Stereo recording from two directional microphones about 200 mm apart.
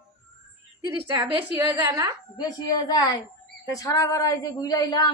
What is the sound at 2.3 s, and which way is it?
A woman's voice, 20° left (ahead or behind).